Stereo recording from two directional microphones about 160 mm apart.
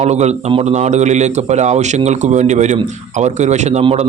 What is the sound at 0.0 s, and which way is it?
Speech, 45° right (ahead or behind).